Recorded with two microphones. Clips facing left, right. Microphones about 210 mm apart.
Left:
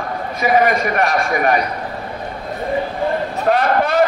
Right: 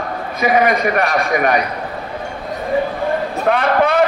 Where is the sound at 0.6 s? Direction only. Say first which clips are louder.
Right 1 dB; 40° left (ahead or behind).